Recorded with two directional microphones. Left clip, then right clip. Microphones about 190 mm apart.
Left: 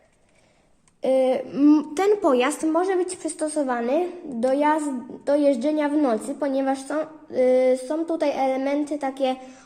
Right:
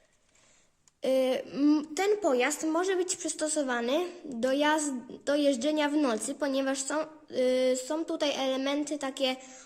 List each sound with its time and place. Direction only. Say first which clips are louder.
1.0 s speech: left 7 dB; 20° right (ahead or behind)
2.7 s speech: left 6 dB; 25° right (ahead or behind)